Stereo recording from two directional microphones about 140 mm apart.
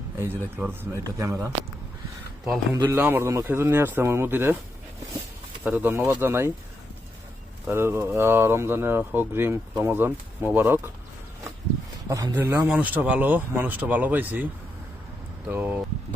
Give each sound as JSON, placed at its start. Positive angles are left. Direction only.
{"t": 0.2, "sound": "speech", "side_deg": -15}
{"t": 2.8, "sound": "speech", "side_deg": -15}
{"t": 5.6, "sound": "speech", "side_deg": -15}
{"t": 7.7, "sound": "speech", "side_deg": -15}
{"t": 12.0, "sound": "speech", "side_deg": -25}
{"t": 15.4, "sound": "speech", "side_deg": -10}